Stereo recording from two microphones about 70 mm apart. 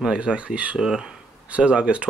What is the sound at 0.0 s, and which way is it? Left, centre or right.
Speech, centre.